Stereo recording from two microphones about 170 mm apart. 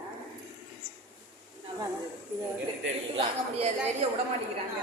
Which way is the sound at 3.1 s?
35° right (ahead or behind).